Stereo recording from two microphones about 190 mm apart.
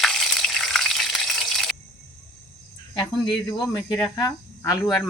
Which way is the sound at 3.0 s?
20° left (ahead or behind).